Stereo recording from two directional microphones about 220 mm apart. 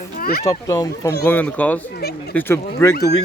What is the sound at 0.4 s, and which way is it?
Speech, 15° left (ahead or behind).